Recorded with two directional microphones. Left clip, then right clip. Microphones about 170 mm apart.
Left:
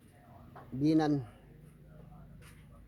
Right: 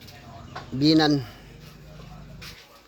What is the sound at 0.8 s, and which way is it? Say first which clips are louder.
Speech: right 9 dB; 15° left (ahead or behind).